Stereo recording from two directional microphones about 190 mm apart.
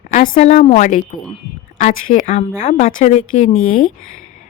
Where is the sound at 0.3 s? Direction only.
35° left (ahead or behind).